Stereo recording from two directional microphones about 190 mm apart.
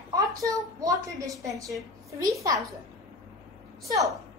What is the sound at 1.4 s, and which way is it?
A woman's voice, 15° right (ahead or behind).